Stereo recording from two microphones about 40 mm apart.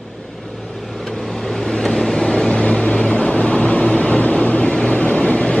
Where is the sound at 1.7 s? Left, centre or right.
Centre.